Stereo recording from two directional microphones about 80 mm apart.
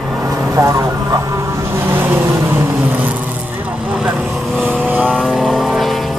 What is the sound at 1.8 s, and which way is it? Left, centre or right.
Vehicle, right.